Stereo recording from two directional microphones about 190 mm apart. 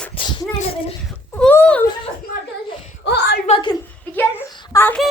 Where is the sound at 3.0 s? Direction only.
60° left (ahead or behind).